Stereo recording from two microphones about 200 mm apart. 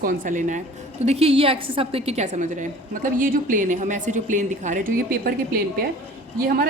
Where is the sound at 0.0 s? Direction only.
40° right (ahead or behind).